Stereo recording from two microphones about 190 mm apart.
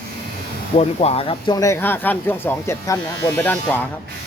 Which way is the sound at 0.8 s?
30° left (ahead or behind).